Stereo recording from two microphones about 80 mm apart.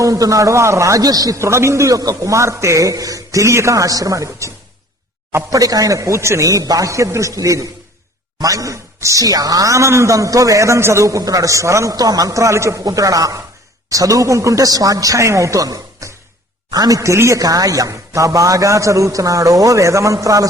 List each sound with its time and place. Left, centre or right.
0.0 s a man's voice: right
1.4 s a man's voice: right